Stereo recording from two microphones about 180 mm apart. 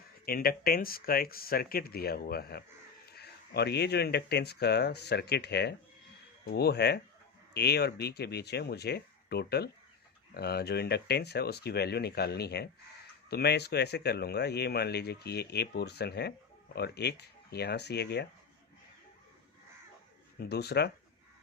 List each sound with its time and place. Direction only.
0.3 s speech: 55° left (ahead or behind)
20.4 s speech: 65° left (ahead or behind)